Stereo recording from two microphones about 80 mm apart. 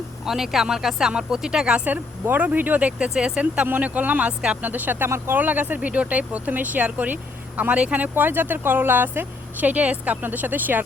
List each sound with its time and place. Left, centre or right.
0.3 s speech: centre; by 10.8 s right